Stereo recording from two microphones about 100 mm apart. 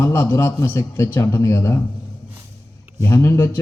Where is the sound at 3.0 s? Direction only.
30° left (ahead or behind).